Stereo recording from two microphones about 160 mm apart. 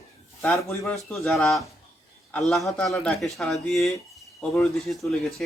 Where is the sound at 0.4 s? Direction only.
10° left (ahead or behind).